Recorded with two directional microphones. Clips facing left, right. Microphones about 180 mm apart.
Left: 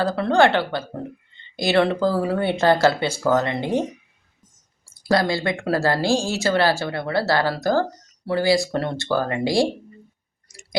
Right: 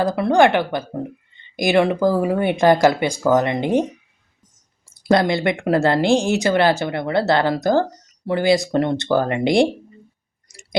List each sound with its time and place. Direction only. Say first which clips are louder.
0.0 s speech: right 2 dB; 15° right (ahead or behind)
4.9 s speech: right 3 dB; 20° right (ahead or behind)
10.5 s a sound: right 1 dB; 20° right (ahead or behind)